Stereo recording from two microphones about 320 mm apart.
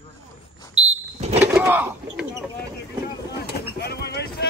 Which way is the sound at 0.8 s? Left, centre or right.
Centre.